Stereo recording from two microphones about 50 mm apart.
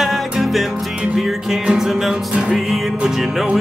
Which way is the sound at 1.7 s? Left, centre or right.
Centre.